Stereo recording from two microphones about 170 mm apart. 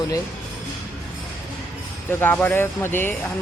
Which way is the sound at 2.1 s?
10° left (ahead or behind).